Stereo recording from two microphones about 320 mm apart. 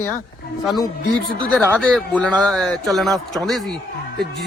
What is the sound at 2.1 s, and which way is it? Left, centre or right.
Speech, centre.